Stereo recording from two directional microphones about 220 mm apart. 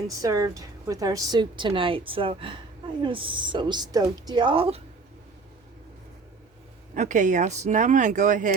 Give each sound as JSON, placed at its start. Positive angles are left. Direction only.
{"t": 0.2, "sound": "a woman's voice", "side_deg": -15}
{"t": 6.9, "sound": "speech", "side_deg": -35}